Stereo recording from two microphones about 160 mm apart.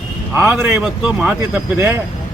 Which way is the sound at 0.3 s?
10° right (ahead or behind).